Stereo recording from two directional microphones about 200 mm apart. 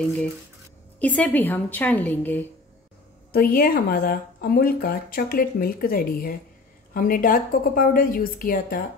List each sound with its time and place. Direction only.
0.0 s a woman's voice: 5° left (ahead or behind)
3.3 s speech: 45° left (ahead or behind)